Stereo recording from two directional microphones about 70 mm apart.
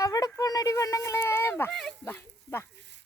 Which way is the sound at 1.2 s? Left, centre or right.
Left.